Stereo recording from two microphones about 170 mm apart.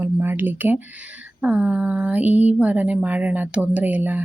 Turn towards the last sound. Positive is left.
turn(degrees=-10)  # may be behind; listen again after turning